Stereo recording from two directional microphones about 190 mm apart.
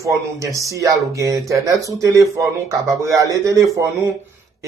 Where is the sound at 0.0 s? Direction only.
15° right (ahead or behind).